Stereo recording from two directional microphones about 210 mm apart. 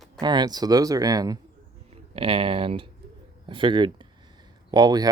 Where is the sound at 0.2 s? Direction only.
20° right (ahead or behind).